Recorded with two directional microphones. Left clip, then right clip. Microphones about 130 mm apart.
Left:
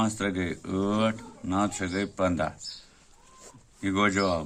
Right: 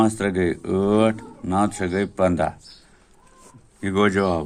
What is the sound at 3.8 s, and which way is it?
Speech, 40° right (ahead or behind).